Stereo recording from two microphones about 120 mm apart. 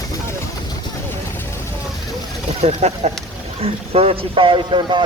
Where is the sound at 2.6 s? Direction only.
65° right (ahead or behind).